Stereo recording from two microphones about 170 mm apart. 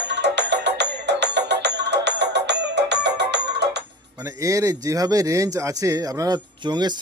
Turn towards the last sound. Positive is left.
turn(degrees=-25)  # may be behind; listen again after turning